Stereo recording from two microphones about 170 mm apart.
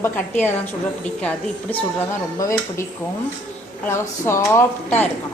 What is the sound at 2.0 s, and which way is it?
Speech, 20° left (ahead or behind).